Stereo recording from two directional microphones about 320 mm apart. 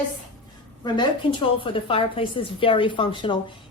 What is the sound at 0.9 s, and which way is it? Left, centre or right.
A woman's voice, centre.